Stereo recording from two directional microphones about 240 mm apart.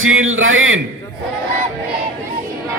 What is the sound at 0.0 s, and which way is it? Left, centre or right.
Speech, right.